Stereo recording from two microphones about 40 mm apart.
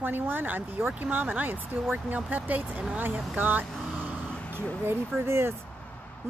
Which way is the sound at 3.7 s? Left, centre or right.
Centre.